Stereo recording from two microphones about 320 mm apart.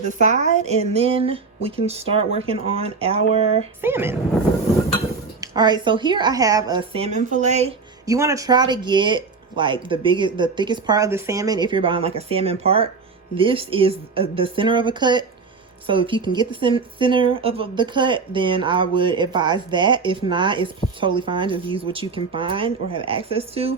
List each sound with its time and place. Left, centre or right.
0.3 s a woman's voice: right
3.8 s a woman's voice: centre
5.4 s a woman's voice: centre